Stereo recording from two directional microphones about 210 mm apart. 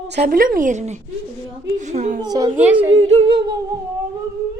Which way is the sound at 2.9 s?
30° right (ahead or behind).